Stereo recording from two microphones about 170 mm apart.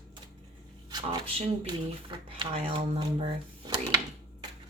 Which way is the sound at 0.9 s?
25° right (ahead or behind).